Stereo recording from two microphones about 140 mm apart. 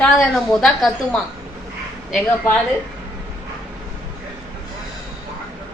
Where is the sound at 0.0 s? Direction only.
Centre (ahead or behind).